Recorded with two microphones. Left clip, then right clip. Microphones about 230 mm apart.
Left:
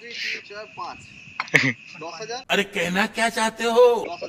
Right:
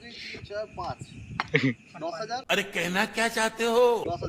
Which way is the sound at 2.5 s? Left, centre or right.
Centre.